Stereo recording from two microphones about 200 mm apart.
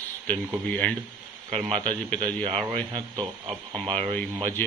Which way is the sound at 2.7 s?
20° right (ahead or behind).